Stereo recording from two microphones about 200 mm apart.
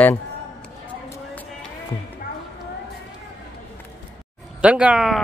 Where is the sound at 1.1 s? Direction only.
10° left (ahead or behind).